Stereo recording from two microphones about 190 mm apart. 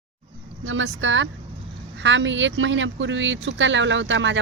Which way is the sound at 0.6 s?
90° right.